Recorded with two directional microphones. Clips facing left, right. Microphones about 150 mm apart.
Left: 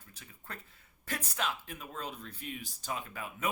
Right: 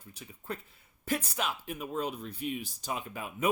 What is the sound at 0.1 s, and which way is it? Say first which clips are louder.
Speech: right 8 dB; 15° right (ahead or behind).